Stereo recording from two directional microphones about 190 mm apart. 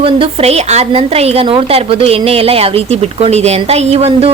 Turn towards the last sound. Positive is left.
turn(degrees=-30)  # may be behind; listen again after turning